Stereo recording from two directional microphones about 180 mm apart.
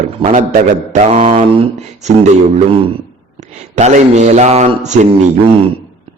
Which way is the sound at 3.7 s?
40° right (ahead or behind).